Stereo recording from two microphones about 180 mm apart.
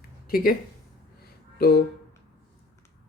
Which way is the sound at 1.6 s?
60° left (ahead or behind).